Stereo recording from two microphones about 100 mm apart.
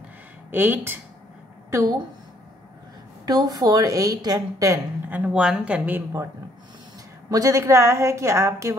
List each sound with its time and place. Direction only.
0.5 s speech: 20° right (ahead or behind)
1.7 s a woman's voice: 30° right (ahead or behind)
3.3 s a woman's voice: 40° right (ahead or behind)
5.1 s speech: 15° right (ahead or behind)
5.9 s speech: 20° right (ahead or behind)
7.2 s speech: 35° right (ahead or behind)